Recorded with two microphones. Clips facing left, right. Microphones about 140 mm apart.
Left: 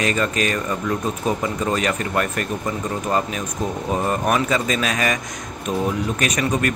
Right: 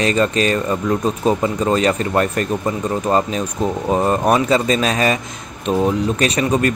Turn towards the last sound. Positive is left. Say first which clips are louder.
# right 4 dB
turn(degrees=-30)  # may be behind; listen again after turning